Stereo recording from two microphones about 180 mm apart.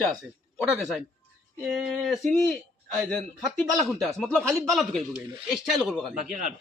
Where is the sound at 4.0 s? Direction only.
5° left (ahead or behind).